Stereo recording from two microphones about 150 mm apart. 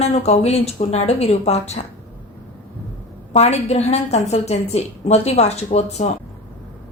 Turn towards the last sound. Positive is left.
turn(degrees=45)  # may be behind; listen again after turning